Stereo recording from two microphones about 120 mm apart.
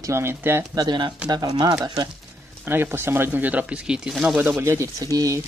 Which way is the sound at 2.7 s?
20° right (ahead or behind).